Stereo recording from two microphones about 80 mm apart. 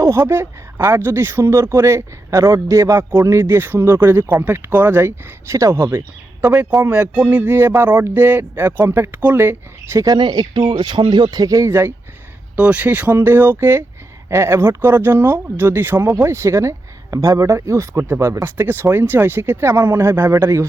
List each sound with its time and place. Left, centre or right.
0.0 s speech: right
3.0 s speech: right
6.9 s speech: centre; by 10.0 s right
10.2 s speech: right
12.5 s speech: centre; by 20.7 s right